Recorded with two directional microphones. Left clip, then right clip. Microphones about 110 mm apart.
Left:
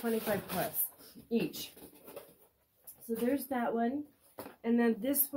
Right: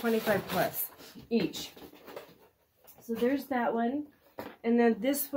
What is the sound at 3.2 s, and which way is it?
Speech, 35° left (ahead or behind).